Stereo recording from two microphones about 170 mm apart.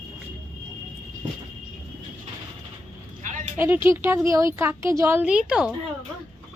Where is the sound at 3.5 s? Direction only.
15° right (ahead or behind).